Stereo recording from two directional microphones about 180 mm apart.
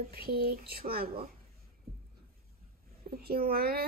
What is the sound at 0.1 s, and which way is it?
A woman's voice, 60° right (ahead or behind).